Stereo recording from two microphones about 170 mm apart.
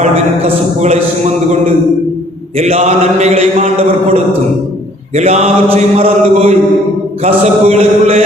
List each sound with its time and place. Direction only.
0.0 s mantra: 40° right (ahead or behind)
2.6 s mantra: 40° right (ahead or behind)